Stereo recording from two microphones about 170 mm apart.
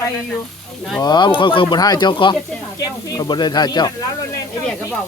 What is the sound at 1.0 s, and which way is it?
Speech, 25° left (ahead or behind).